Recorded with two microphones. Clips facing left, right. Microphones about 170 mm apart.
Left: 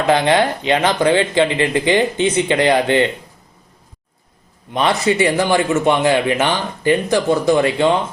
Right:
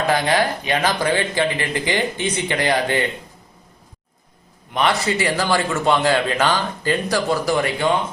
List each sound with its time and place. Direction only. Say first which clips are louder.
0.0 s speech: left 4 dB; 25° left (ahead or behind)
4.7 s speech: left 3 dB; 25° left (ahead or behind)